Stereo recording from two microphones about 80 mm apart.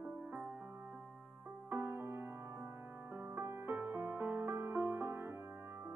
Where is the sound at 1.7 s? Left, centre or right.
Right.